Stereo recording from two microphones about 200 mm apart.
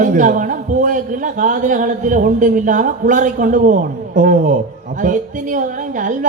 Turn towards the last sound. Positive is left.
turn(degrees=-40)  # may be behind; listen again after turning